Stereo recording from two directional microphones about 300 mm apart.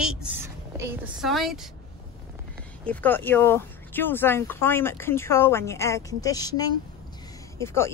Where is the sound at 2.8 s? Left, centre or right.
Centre.